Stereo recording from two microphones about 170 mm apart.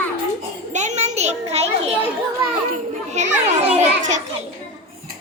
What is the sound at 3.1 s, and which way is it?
A child's voice, 45° right (ahead or behind).